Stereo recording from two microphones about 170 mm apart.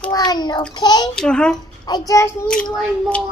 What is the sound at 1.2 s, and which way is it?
Speech, 5° left (ahead or behind).